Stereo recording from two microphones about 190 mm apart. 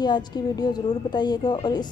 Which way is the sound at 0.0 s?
20° left (ahead or behind).